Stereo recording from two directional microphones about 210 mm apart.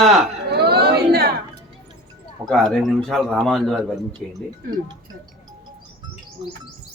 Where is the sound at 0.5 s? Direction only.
50° right (ahead or behind).